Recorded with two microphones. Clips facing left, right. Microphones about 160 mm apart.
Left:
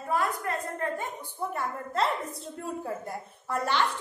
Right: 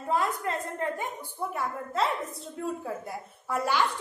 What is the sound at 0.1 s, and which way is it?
Speech, 20° right (ahead or behind).